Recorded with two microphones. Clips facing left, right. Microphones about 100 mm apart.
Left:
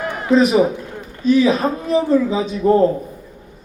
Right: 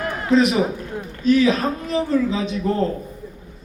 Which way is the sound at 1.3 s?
15° left (ahead or behind).